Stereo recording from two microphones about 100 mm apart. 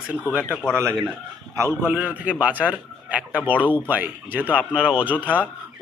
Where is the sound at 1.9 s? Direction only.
15° right (ahead or behind).